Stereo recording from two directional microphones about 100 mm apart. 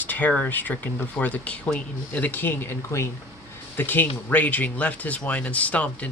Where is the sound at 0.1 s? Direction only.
15° left (ahead or behind).